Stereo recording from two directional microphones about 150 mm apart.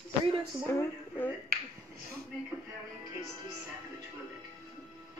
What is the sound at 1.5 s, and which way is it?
Finger snapping, 80° right.